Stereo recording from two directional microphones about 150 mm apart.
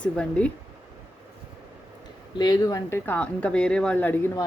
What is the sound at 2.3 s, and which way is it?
Speech, 25° left (ahead or behind).